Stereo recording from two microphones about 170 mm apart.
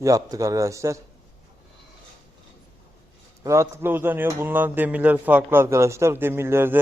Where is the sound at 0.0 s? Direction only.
20° right (ahead or behind).